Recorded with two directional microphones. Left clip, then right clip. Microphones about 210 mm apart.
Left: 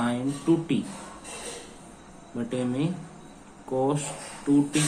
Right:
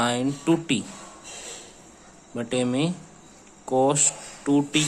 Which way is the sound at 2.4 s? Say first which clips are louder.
Right 4 dB; 55° right (ahead or behind).